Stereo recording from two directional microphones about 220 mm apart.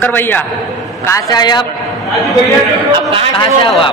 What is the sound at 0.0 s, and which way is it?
A man's voice, 10° left (ahead or behind).